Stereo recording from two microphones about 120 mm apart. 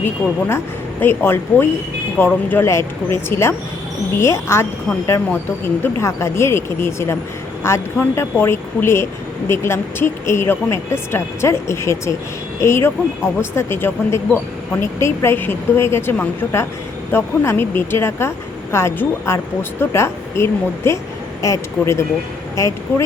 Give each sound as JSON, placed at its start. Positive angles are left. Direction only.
{"t": 0.0, "sound": "a woman's voice", "side_deg": 20}